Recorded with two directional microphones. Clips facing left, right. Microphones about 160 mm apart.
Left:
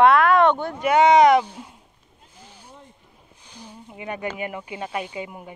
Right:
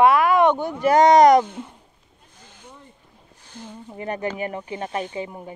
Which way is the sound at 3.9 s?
40° right (ahead or behind).